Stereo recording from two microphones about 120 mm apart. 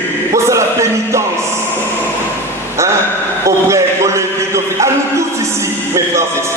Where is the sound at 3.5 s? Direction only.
25° right (ahead or behind).